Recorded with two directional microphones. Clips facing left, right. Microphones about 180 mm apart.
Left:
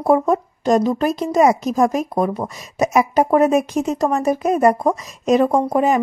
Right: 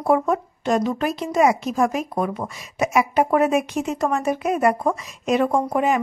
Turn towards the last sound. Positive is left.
turn(degrees=35)  # may be behind; listen again after turning